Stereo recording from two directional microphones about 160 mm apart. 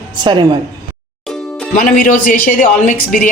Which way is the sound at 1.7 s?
55° left (ahead or behind).